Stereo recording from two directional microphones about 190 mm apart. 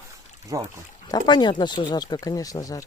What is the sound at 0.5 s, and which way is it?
Speech, 20° right (ahead or behind).